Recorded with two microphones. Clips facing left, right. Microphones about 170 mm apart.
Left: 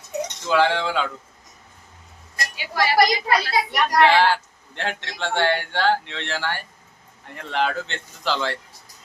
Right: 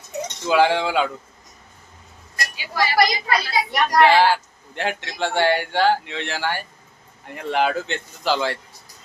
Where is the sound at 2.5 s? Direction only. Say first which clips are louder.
Left 1 dB; 65° left (ahead or behind).